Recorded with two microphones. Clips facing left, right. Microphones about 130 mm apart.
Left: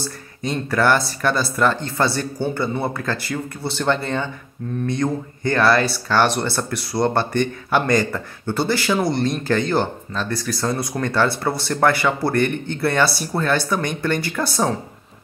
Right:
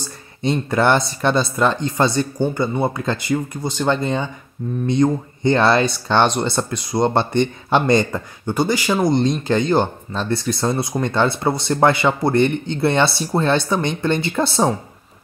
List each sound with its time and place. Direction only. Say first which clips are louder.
0.0 s speech: right 4 dB; 25° right (ahead or behind)